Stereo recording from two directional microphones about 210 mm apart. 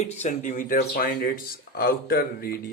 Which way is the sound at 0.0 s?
30° left (ahead or behind).